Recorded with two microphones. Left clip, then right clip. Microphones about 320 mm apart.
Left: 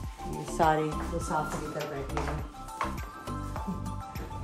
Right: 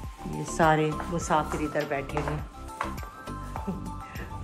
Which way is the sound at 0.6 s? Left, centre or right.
Right.